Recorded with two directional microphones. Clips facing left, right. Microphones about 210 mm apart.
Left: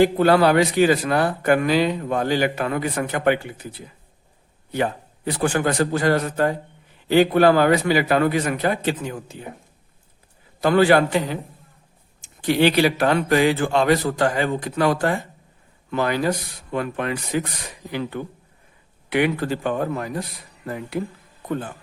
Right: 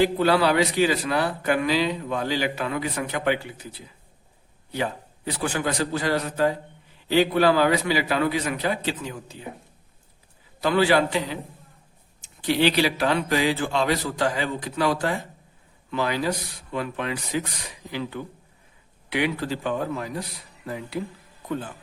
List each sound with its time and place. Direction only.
0.0 s a man's voice: 50° left (ahead or behind)
10.6 s a man's voice: 50° left (ahead or behind)